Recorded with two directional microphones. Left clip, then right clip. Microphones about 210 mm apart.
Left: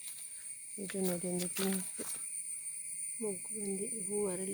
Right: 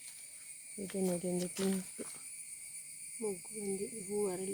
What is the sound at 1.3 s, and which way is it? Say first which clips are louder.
Speech: even; 35° left (ahead or behind).